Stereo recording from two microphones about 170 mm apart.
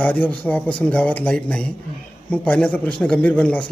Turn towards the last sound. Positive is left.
turn(degrees=10)  # may be behind; listen again after turning